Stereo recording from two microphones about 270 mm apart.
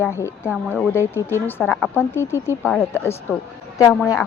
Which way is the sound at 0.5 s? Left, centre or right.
Centre.